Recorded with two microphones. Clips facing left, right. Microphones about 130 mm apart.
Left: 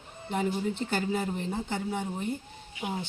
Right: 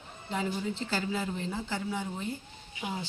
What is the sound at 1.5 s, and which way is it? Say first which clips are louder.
Speech: left 2 dB; 25° left (ahead or behind).